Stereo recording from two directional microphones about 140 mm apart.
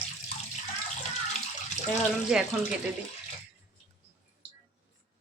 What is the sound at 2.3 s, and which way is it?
Speech, 5° right (ahead or behind).